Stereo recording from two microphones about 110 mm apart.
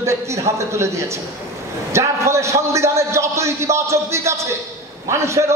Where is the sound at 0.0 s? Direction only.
25° right (ahead or behind).